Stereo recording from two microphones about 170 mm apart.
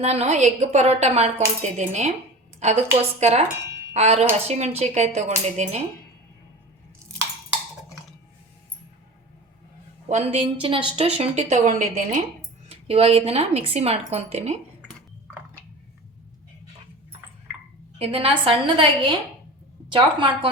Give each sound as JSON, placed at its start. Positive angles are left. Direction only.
{"t": 0.0, "sound": "a woman's voice", "side_deg": -40}
{"t": 10.1, "sound": "a woman's voice", "side_deg": -35}
{"t": 12.6, "sound": "a woman's voice", "side_deg": -35}
{"t": 18.0, "sound": "a woman's voice", "side_deg": -35}